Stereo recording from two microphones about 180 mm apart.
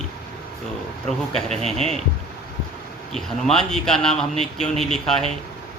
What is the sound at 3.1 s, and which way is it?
Mantra, 5° left (ahead or behind).